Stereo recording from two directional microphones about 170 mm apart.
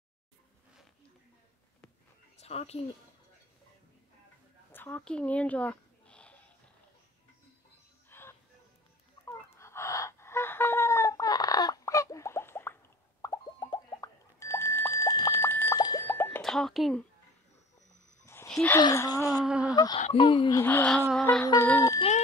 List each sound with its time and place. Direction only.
2.4 s a woman's voice: 40° left (ahead or behind)
4.7 s a sound: 10° left (ahead or behind)
8.1 s music: 15° left (ahead or behind)
9.2 s fowl: 15° left (ahead or behind)
13.2 s a sound: 20° left (ahead or behind)
16.4 s speech: centre (ahead or behind)
18.2 s a sound: 15° left (ahead or behind)
18.8 s speech: 20° left (ahead or behind)
19.4 s a sound: 5° right (ahead or behind)
19.7 s speech: 20° left (ahead or behind)
20.0 s speech: 30° left (ahead or behind)
20.5 s speech: 10° left (ahead or behind)
21.6 s speech: 20° left (ahead or behind)